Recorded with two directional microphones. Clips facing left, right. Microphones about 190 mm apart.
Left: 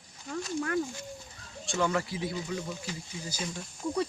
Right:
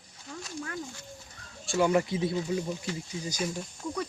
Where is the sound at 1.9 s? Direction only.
20° right (ahead or behind).